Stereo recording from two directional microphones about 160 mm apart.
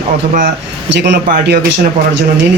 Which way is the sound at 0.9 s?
90° right.